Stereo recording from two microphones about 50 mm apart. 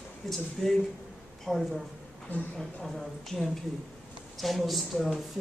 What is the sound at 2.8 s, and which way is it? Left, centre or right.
Speech, centre.